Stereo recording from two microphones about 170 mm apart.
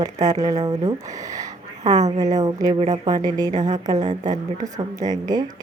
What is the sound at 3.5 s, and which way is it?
Speech, 45° right (ahead or behind).